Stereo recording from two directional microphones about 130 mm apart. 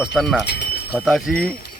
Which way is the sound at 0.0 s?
Centre (ahead or behind).